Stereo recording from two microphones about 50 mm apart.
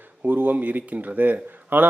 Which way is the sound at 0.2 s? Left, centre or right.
Right.